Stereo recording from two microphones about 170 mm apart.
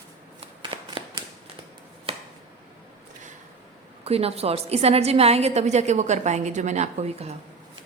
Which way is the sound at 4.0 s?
35° right (ahead or behind).